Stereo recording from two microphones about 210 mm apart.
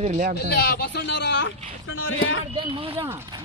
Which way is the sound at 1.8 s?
70° left (ahead or behind).